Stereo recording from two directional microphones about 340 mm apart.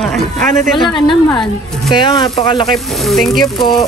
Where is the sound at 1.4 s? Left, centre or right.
Centre.